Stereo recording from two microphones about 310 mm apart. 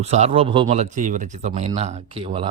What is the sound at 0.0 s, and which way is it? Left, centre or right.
Speech, right.